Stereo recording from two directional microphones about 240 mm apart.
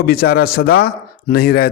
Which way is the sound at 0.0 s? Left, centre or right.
Left.